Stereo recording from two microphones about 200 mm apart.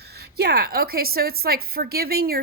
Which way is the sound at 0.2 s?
55° right (ahead or behind).